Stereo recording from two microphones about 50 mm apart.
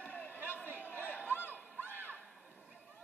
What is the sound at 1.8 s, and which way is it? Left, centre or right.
Music, left.